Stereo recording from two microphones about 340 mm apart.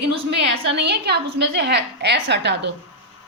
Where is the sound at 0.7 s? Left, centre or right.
Right.